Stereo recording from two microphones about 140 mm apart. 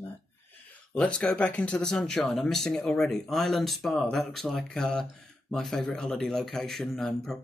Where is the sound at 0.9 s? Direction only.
10° left (ahead or behind).